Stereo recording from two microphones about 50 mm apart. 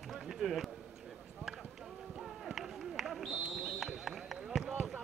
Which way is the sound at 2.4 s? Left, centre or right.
Centre.